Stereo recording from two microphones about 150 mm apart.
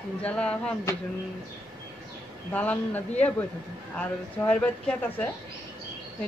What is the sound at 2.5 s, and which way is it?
A woman's voice, 10° left (ahead or behind).